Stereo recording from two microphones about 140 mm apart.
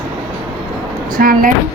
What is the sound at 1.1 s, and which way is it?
Speech, 85° right.